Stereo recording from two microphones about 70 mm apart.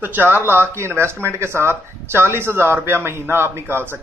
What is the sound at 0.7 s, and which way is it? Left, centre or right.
Speech, right.